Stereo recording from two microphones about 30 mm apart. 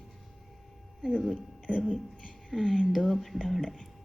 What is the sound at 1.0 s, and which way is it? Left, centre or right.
A woman's voice, centre.